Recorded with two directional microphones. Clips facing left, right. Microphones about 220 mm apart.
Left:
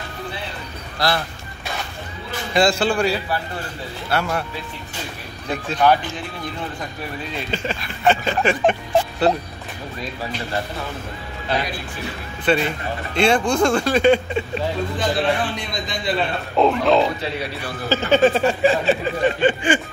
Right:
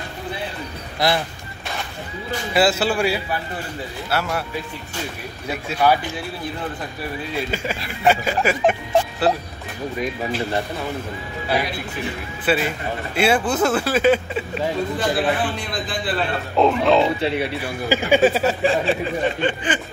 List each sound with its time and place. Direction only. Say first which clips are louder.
0.9 s speech: right 2 dB; 20° right (ahead or behind)
2.5 s speech: left 1 dB; 5° right (ahead or behind)
5.5 s speech: left 1 dB; 10° right (ahead or behind)
8.0 s speech: even; 5° right (ahead or behind)
11.5 s speech: right 1 dB; 10° right (ahead or behind)
17.6 s speech: left 1 dB; 10° right (ahead or behind); by 19.8 s 10° left (ahead or behind)